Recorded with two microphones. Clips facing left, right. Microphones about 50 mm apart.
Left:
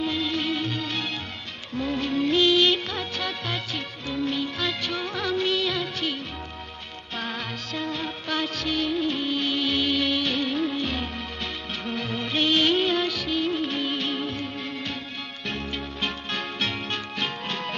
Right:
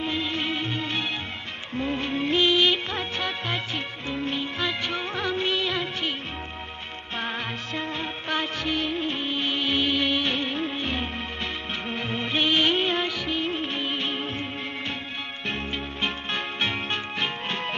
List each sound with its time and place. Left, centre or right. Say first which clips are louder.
0.0 s music: left 1 dB; right
1.7 s music of bollywood: left 1 dB; right
7.2 s music: right 1 dB; right
11.9 s music of bollywood: even; right
15.4 s music: even; right